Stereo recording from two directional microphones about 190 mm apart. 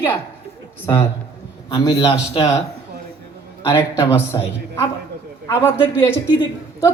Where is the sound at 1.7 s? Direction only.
25° left (ahead or behind).